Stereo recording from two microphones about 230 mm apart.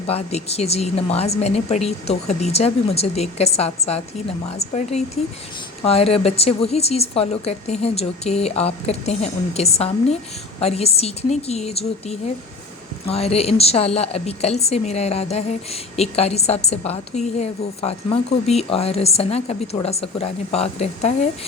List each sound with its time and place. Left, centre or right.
0.1 s a woman's voice: left